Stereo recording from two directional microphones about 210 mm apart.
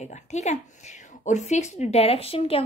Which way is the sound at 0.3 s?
35° left (ahead or behind).